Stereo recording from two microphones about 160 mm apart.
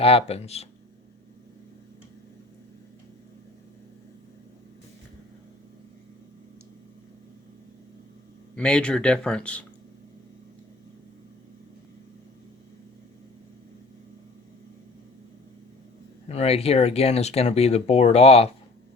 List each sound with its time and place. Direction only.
0.0 s speech: 40° left (ahead or behind)
8.5 s speech: 5° left (ahead or behind)
16.3 s speech: 40° left (ahead or behind)